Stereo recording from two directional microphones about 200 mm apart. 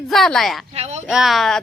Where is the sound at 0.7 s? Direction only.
35° right (ahead or behind).